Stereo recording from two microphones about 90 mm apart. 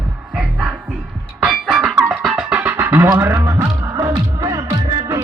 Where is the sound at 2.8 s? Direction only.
30° right (ahead or behind).